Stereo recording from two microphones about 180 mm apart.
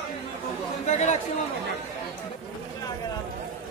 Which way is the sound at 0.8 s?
40° left (ahead or behind).